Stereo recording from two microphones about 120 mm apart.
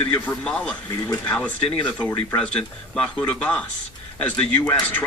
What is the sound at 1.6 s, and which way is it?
Speech, 45° left (ahead or behind).